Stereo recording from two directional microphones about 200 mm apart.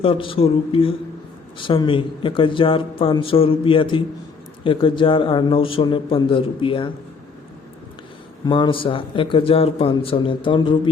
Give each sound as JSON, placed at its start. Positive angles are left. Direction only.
{"t": 0.0, "sound": "speech", "side_deg": 25}
{"t": 8.4, "sound": "speech", "side_deg": 25}